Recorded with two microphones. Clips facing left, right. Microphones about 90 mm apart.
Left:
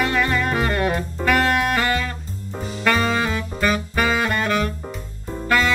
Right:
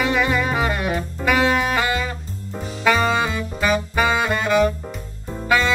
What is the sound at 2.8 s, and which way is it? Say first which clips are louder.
Saxophone: right 2 dB; 10° right (ahead or behind).